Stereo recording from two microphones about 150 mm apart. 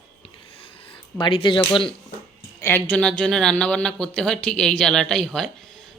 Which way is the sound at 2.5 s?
15° left (ahead or behind).